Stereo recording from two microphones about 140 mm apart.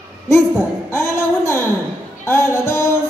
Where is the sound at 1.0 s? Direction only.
15° left (ahead or behind).